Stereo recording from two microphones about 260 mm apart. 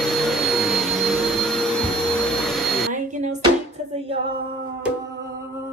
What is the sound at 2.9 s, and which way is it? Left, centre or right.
Music, right.